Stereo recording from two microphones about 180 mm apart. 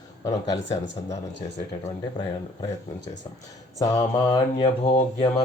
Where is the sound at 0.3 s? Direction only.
20° left (ahead or behind).